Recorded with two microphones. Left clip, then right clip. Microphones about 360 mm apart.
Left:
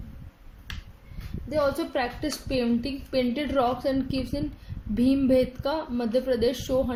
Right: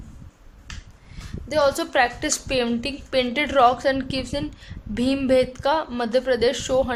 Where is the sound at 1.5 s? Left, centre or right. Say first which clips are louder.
Right 5 dB; right.